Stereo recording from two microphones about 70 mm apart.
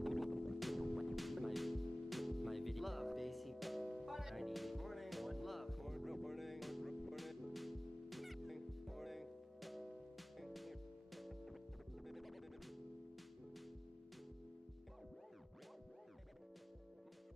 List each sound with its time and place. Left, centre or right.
0.0 s music: centre